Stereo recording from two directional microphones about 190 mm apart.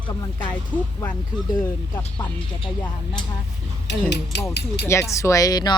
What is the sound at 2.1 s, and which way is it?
Speech, 25° left (ahead or behind).